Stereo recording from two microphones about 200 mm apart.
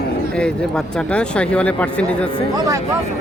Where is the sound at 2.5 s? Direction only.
15° right (ahead or behind).